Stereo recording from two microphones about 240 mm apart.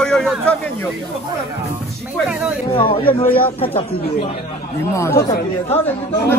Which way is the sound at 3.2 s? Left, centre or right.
Centre.